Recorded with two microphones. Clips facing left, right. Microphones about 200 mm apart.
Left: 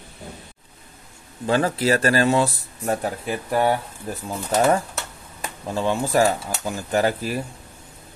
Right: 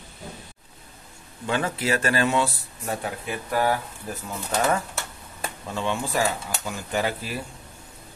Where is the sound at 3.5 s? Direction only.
25° left (ahead or behind).